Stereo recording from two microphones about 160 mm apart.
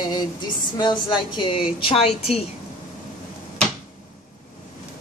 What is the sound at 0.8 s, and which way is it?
A woman's voice, 30° left (ahead or behind).